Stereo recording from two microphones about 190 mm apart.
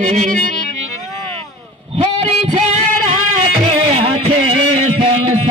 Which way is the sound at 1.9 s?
35° right (ahead or behind).